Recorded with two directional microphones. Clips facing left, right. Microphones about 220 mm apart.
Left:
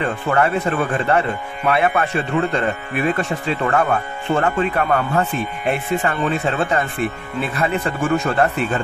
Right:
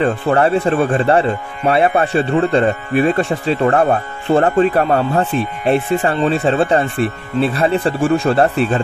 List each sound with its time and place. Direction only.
0.0 s speech: 35° right (ahead or behind)